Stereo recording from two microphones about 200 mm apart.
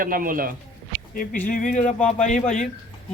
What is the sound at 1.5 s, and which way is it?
Speech, 40° left (ahead or behind).